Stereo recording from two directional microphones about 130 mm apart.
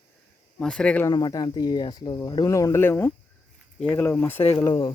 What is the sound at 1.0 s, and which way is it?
Speech, 30° left (ahead or behind).